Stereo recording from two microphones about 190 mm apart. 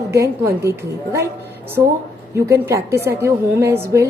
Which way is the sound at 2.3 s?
15° right (ahead or behind).